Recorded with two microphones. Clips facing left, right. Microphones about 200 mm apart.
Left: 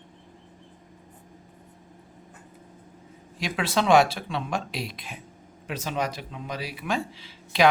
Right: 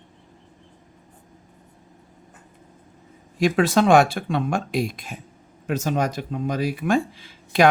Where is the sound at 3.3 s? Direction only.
45° right (ahead or behind).